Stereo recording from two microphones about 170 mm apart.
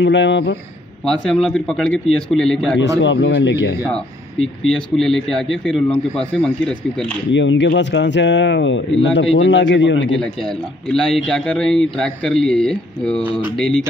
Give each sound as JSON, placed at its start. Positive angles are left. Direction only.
{"t": 0.0, "sound": "speech", "side_deg": 90}
{"t": 1.0, "sound": "speech", "side_deg": 5}
{"t": 3.0, "sound": "speech", "side_deg": 90}
{"t": 3.9, "sound": "speech", "side_deg": 5}
{"t": 7.3, "sound": "speech", "side_deg": 90}
{"t": 10.2, "sound": "speech", "side_deg": 5}